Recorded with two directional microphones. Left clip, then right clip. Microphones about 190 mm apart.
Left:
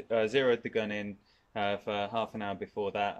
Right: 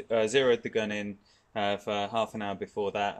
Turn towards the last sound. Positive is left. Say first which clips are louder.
# right 2 dB
turn(degrees=-15)  # may be behind; listen again after turning